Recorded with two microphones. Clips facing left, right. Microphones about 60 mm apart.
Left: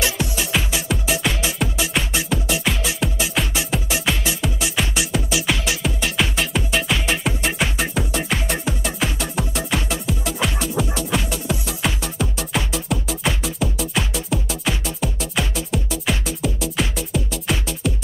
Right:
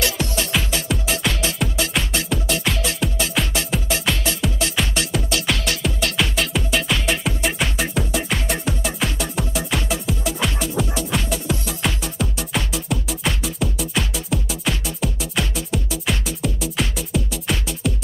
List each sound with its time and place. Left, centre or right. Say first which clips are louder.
0.2 s music: even; centre